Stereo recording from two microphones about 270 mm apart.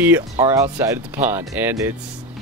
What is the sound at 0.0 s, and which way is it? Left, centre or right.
Speech, centre.